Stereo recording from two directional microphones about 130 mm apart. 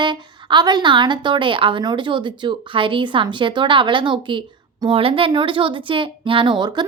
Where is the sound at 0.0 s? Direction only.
35° right (ahead or behind).